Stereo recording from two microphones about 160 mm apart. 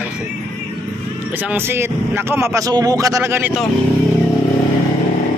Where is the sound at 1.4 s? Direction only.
10° right (ahead or behind).